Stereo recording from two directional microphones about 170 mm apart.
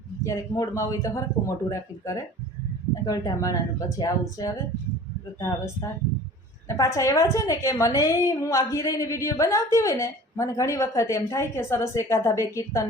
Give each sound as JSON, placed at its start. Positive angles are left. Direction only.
{"t": 0.2, "sound": "a woman's voice", "side_deg": 20}